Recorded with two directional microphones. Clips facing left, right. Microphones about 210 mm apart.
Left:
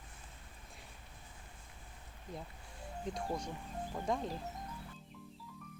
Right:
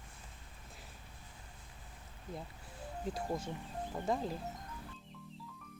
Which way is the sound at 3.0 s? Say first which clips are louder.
Right 1 dB; 5° right (ahead or behind).